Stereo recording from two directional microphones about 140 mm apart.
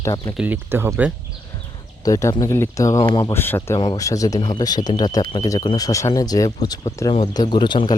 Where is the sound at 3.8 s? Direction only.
30° left (ahead or behind).